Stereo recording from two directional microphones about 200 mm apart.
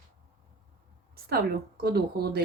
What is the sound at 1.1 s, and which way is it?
A woman's voice, 50° right (ahead or behind).